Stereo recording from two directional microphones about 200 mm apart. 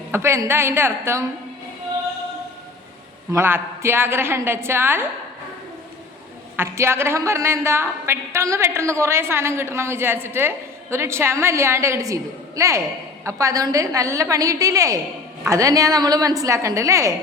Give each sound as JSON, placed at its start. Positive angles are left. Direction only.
{"t": 0.1, "sound": "a woman's voice", "side_deg": -15}
{"t": 3.3, "sound": "a woman's voice", "side_deg": -10}
{"t": 6.6, "sound": "a woman's voice", "side_deg": -15}